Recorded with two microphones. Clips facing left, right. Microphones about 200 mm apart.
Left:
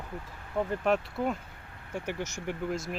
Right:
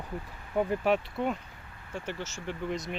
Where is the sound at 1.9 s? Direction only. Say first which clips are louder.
Left 2 dB; 15° left (ahead or behind).